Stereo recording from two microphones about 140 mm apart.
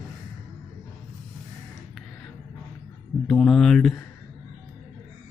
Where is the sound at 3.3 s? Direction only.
Centre (ahead or behind).